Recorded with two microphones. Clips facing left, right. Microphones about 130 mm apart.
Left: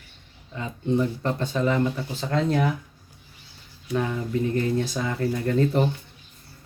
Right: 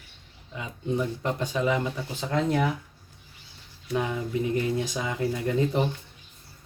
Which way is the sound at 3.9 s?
15° right (ahead or behind).